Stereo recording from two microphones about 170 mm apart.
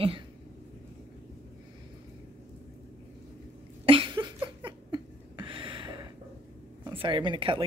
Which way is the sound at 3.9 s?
30° right (ahead or behind).